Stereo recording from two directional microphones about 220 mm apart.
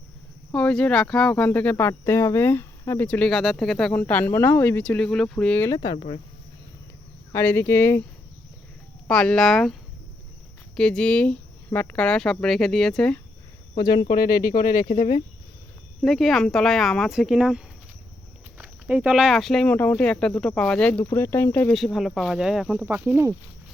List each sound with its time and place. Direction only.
0.5 s speech: 5° left (ahead or behind); by 6.1 s 25° left (ahead or behind)
7.3 s speech: 10° left (ahead or behind)
9.0 s speech: 5° left (ahead or behind)
10.8 s speech: 5° left (ahead or behind)
13.7 s speech: 20° left (ahead or behind)
14.2 s speech: 40° left (ahead or behind)
16.0 s speech: centre (ahead or behind)